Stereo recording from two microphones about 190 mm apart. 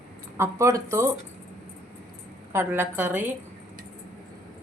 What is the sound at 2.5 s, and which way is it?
Speech, 10° right (ahead or behind).